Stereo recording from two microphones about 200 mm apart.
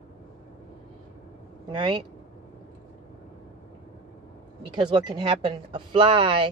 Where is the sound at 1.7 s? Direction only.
25° right (ahead or behind).